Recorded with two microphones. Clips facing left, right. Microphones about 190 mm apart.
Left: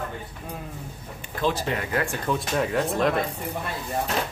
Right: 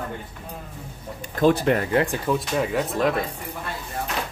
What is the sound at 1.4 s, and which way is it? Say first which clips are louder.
Speech: right 7 dB; 55° right (ahead or behind).